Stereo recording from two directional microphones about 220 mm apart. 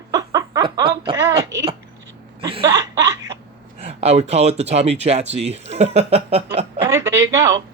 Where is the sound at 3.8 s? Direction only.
30° right (ahead or behind).